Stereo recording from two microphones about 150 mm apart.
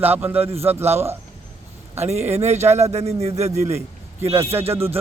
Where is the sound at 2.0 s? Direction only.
45° right (ahead or behind).